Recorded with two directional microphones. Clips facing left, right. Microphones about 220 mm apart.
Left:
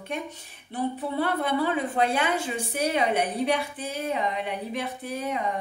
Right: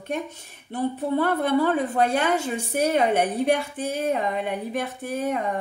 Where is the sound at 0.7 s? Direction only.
45° right (ahead or behind).